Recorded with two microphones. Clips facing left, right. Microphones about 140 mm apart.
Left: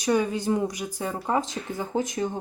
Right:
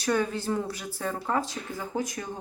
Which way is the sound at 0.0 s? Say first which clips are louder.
Left 3 dB; 15° left (ahead or behind).